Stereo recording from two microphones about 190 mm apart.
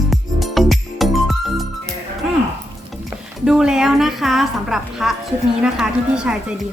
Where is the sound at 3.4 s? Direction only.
5° right (ahead or behind).